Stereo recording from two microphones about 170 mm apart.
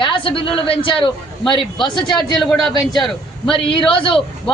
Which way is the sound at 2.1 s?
Centre (ahead or behind).